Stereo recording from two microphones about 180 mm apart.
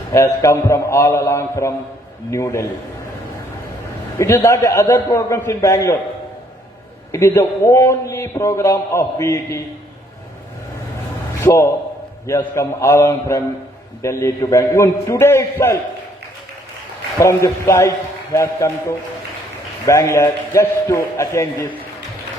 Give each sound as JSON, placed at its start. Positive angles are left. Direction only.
{"t": 0.1, "sound": "a man's voice", "side_deg": 15}
{"t": 4.2, "sound": "a man's voice", "side_deg": 15}
{"t": 7.1, "sound": "a man's voice", "side_deg": 15}
{"t": 11.3, "sound": "a man's voice", "side_deg": 15}
{"t": 17.2, "sound": "a man's voice", "side_deg": 15}